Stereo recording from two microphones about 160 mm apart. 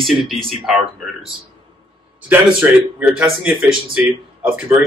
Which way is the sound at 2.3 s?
10° right (ahead or behind).